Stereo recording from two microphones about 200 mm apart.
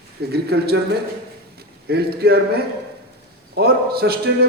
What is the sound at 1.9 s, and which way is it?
Speech, 50° right (ahead or behind).